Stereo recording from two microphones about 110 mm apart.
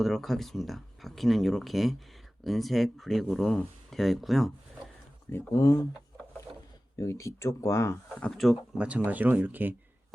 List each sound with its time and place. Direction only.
0.0 s speech: centre (ahead or behind)
5.3 s speech: 25° left (ahead or behind)
6.9 s speech: 30° left (ahead or behind)
8.1 s speech: 5° left (ahead or behind)
9.0 s speech: 15° right (ahead or behind)